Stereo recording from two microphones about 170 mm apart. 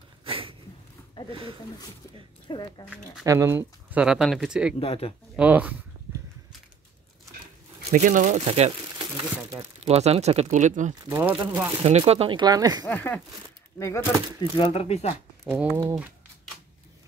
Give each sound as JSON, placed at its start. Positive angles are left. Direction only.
{"t": 0.2, "sound": "a sound", "side_deg": -30}
{"t": 2.5, "sound": "speech", "side_deg": 30}
{"t": 3.3, "sound": "speech", "side_deg": -15}
{"t": 4.7, "sound": "speech", "side_deg": 35}
{"t": 5.3, "sound": "speech", "side_deg": -10}
{"t": 7.9, "sound": "speech", "side_deg": -50}
{"t": 11.1, "sound": "speech", "side_deg": -15}
{"t": 12.0, "sound": "speech", "side_deg": -30}
{"t": 12.8, "sound": "speech", "side_deg": 10}
{"t": 14.4, "sound": "speech", "side_deg": 35}
{"t": 15.6, "sound": "speech", "side_deg": -10}